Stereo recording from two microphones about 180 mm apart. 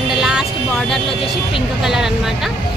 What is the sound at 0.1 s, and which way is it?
Vehicle, 5° right (ahead or behind).